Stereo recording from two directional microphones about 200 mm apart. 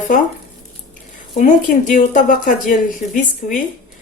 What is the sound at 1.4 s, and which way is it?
Speech, 40° left (ahead or behind).